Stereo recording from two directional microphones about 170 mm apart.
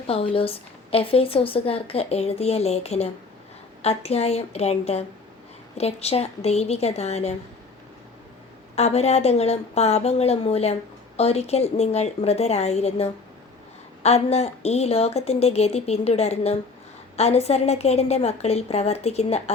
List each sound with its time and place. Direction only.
0.1 s a woman's voice: 35° left (ahead or behind)
8.7 s a woman's voice: 40° left (ahead or behind)